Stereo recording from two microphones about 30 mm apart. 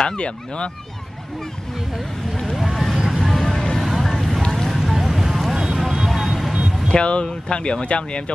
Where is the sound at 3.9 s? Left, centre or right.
Centre.